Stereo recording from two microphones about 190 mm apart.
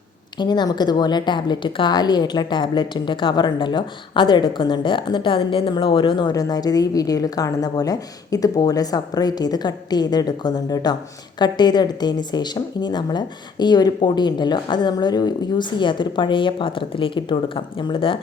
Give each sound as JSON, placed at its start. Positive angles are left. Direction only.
{"t": 0.3, "sound": "a woman's voice", "side_deg": 20}